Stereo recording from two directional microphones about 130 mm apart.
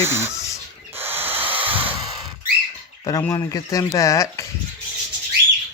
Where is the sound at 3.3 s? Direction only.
30° left (ahead or behind).